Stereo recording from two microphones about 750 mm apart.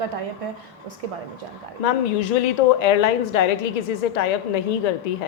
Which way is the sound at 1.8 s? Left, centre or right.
Left.